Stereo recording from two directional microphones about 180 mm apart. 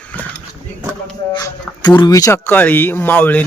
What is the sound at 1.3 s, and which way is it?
Speech, 20° left (ahead or behind).